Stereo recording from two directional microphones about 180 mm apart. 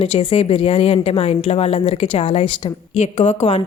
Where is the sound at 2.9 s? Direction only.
40° left (ahead or behind).